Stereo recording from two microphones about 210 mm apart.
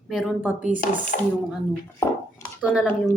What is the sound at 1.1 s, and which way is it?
Speech, 40° left (ahead or behind).